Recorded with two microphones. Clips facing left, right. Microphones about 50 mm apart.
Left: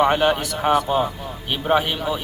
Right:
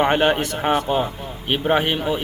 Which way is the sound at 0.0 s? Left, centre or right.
Right.